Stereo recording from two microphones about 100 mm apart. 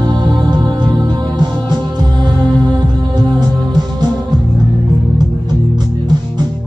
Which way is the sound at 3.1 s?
45° right (ahead or behind).